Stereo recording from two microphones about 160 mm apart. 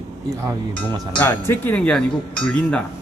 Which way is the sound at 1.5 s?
10° left (ahead or behind).